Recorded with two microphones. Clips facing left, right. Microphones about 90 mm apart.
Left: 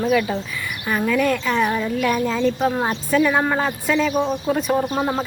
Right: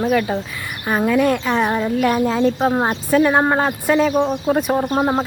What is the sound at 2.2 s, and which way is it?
Speech, 10° right (ahead or behind).